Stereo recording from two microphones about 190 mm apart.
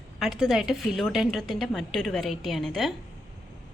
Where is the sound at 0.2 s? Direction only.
Centre (ahead or behind).